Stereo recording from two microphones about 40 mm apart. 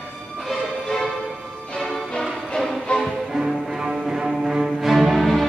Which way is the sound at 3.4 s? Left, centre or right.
Centre.